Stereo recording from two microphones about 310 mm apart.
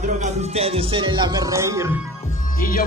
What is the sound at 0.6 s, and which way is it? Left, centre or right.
Music, centre.